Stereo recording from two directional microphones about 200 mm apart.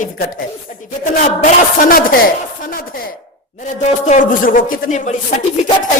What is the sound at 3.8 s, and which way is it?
Speech, 35° left (ahead or behind).